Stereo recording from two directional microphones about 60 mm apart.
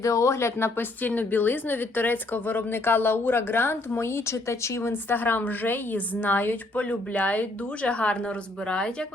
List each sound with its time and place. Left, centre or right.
0.0 s speech: left
0.8 s a woman's voice: left